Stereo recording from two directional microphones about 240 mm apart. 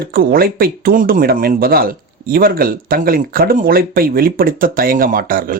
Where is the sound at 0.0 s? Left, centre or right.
Right.